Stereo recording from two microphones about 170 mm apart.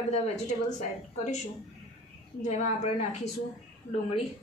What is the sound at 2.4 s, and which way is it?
Speech, 40° left (ahead or behind).